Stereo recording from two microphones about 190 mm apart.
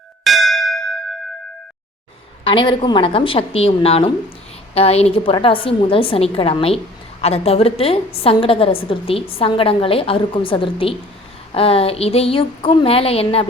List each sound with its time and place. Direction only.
0.3 s bell: centre (ahead or behind)
2.4 s a woman's voice: 25° left (ahead or behind)